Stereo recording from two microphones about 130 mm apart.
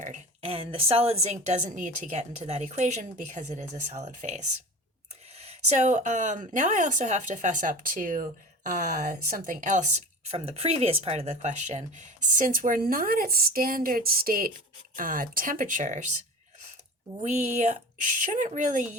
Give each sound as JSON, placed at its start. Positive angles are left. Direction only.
{"t": 0.0, "sound": "a sound", "side_deg": -70}
{"t": 0.4, "sound": "a woman's voice", "side_deg": -50}
{"t": 17.2, "sound": "speech", "side_deg": -65}
{"t": 18.2, "sound": "speech", "side_deg": -80}